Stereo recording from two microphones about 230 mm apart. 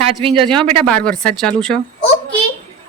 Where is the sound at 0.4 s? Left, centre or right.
Centre.